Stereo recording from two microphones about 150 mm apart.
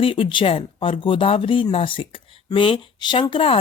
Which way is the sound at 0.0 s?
35° left (ahead or behind).